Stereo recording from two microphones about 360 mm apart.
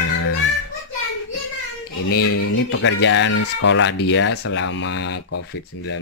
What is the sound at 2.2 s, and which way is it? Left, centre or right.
Speech, left.